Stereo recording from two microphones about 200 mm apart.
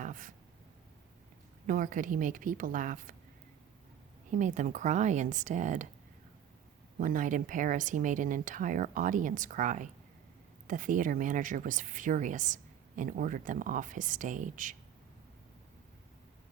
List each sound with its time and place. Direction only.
0.0 s a sound: 40° right (ahead or behind)
1.6 s speech: 40° right (ahead or behind)
4.3 s speech: 40° right (ahead or behind)
7.0 s speech: 40° right (ahead or behind)